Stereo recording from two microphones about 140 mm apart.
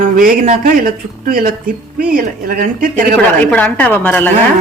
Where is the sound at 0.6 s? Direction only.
90° right.